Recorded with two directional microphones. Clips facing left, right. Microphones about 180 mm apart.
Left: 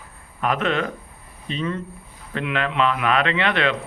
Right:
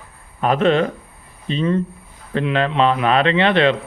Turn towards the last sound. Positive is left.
turn(degrees=-30)  # may be behind; listen again after turning